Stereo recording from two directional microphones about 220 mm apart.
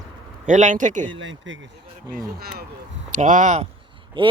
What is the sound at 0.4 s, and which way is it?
Speech, 35° right (ahead or behind).